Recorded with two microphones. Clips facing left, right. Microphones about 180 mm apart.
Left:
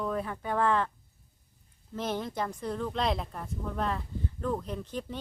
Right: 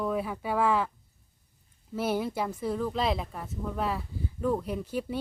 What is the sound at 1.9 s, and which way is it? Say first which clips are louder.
Speech: right 4 dB; 10° right (ahead or behind).